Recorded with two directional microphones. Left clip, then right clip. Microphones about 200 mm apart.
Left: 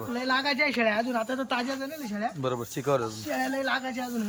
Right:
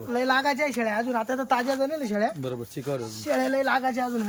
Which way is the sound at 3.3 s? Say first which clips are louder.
Right 6 dB; 20° right (ahead or behind).